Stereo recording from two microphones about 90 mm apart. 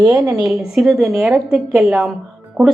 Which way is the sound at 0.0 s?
40° right (ahead or behind).